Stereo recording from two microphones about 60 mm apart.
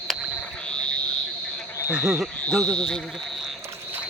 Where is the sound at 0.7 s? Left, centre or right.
Centre.